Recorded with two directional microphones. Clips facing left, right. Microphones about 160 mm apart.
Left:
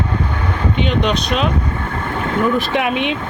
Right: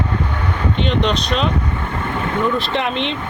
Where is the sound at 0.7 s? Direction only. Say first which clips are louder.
Left 1 dB; 5° left (ahead or behind).